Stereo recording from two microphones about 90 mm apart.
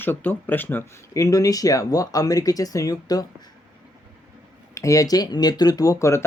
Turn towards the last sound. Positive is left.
turn(degrees=35)  # may be behind; listen again after turning